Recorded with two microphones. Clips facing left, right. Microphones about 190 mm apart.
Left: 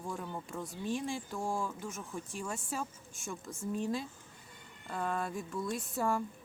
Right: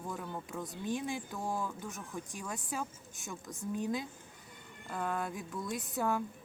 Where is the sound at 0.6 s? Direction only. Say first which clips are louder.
Even; 20° right (ahead or behind).